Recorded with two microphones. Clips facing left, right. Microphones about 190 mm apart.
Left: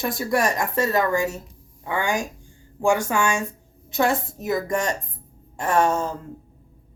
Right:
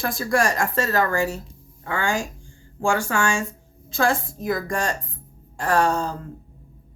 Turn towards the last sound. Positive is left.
turn(degrees=20)  # may be behind; listen again after turning